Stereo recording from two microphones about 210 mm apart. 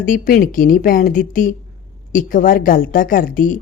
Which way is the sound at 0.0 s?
40° left (ahead or behind).